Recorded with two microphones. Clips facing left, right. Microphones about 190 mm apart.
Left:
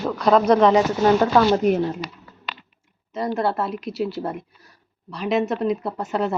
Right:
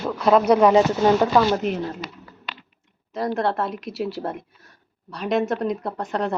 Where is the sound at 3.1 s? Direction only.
Centre (ahead or behind).